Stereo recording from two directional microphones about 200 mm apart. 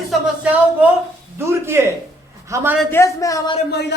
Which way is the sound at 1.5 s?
15° right (ahead or behind).